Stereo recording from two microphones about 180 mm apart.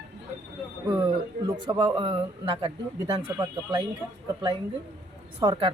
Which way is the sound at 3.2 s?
20° right (ahead or behind).